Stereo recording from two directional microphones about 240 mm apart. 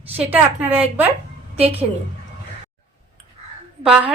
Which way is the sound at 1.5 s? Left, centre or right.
Right.